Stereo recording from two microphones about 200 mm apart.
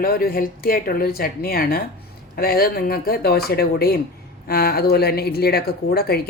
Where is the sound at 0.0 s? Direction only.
50° left (ahead or behind).